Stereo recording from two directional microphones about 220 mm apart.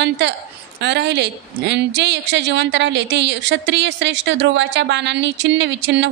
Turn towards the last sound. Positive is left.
turn(degrees=-55)  # may be behind; listen again after turning